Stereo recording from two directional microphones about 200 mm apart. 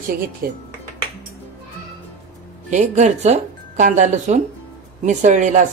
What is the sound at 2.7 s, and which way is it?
Speech, 35° right (ahead or behind).